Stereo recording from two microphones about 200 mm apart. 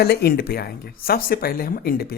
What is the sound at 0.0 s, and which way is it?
Speech, 55° left (ahead or behind).